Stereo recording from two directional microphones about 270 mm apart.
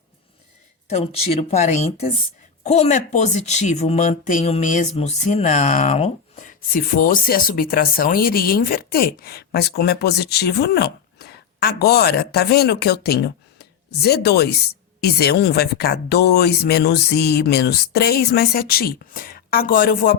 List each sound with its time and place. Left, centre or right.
0.9 s speech: left